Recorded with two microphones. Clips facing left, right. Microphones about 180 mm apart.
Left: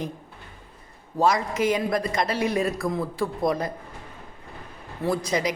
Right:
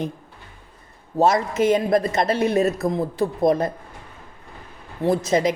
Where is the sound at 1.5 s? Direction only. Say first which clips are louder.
Right 5 dB; 25° right (ahead or behind).